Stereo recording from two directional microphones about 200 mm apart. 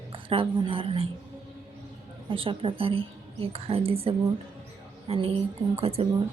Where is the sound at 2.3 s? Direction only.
25° right (ahead or behind).